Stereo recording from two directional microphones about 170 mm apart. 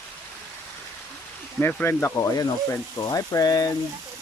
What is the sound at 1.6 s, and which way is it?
Speech, 10° left (ahead or behind).